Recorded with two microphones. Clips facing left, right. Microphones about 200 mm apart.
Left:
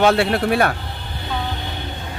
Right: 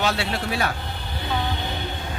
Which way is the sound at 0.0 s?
55° left (ahead or behind).